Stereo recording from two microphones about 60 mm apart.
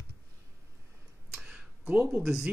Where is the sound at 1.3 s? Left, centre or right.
Centre.